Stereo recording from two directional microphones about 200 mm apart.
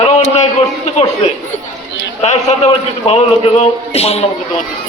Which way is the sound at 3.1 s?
30° left (ahead or behind).